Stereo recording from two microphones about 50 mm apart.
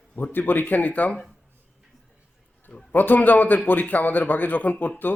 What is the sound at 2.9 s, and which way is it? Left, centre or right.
A man's voice, left.